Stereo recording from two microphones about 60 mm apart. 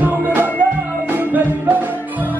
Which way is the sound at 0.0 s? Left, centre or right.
Right.